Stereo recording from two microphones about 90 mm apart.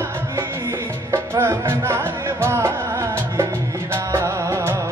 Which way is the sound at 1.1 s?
30° right (ahead or behind).